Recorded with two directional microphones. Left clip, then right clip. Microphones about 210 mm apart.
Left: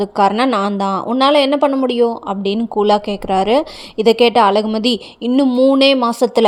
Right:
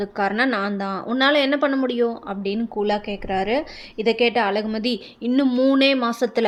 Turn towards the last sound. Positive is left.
turn(degrees=25)  # may be behind; listen again after turning